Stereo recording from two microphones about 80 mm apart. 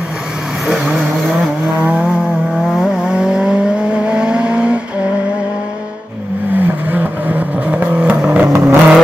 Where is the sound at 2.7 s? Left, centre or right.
Centre.